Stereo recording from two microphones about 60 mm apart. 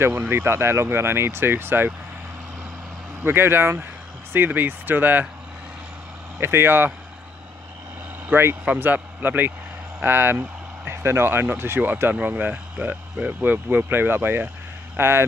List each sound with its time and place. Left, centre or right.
0.3 s speech: right
3.3 s speech: right
6.4 s speech: right
8.3 s speech: right
11.9 s speech: right